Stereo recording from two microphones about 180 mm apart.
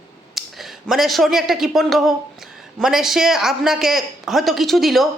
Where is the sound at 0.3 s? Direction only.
Centre (ahead or behind).